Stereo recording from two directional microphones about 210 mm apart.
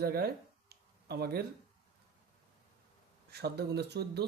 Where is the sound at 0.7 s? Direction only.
50° right (ahead or behind).